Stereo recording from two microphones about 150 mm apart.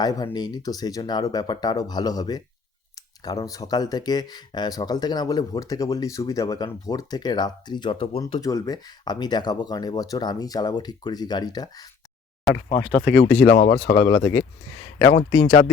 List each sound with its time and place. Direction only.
0.0 s speech: 25° left (ahead or behind)
8.4 s speech: 20° left (ahead or behind)
13.1 s a man's voice: 10° left (ahead or behind); by 15.6 s 35° left (ahead or behind)